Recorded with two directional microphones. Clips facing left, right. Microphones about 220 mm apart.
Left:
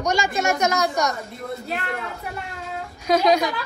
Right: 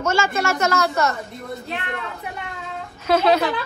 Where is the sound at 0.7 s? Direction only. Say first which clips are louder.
Right 2 dB; 15° left (ahead or behind).